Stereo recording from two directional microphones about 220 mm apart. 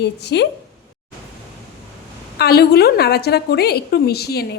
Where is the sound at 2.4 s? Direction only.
45° left (ahead or behind).